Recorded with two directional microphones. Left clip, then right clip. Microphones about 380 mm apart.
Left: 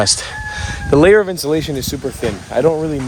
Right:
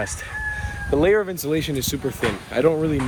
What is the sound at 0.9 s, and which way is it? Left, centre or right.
Speech, left.